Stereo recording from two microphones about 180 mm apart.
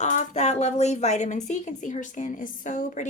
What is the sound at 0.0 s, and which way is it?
Speech, 40° left (ahead or behind).